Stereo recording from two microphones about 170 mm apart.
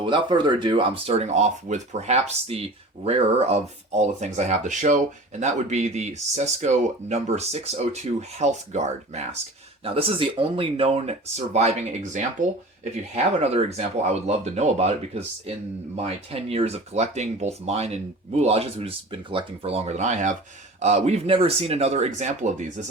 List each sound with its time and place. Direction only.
0.0 s speech: 30° right (ahead or behind); by 22.9 s 45° right (ahead or behind)